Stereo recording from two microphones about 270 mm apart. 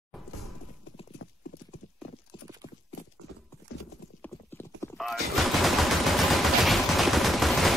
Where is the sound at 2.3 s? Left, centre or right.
Centre.